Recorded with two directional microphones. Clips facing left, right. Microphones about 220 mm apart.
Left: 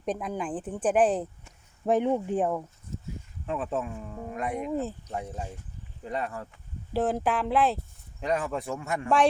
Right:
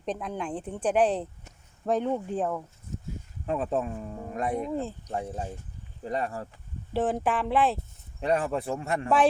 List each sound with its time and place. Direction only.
0.0 s speech: 10° left (ahead or behind)
1.8 s speech: 15° left (ahead or behind)
3.4 s speech: 40° right (ahead or behind)
4.6 s speech: 5° left (ahead or behind)
6.1 s speech: 35° right (ahead or behind)
6.9 s speech: centre (ahead or behind)
8.2 s speech: 30° right (ahead or behind)